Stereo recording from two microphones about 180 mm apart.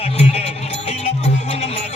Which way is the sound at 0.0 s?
35° left (ahead or behind).